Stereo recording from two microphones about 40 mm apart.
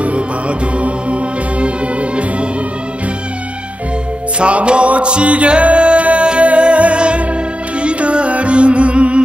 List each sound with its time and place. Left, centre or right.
0.0 s music: right
4.4 s music: right